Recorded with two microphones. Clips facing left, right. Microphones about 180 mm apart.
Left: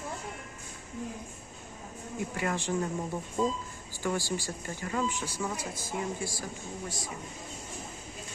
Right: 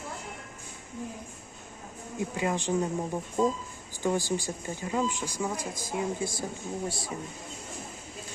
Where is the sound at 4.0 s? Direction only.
15° right (ahead or behind).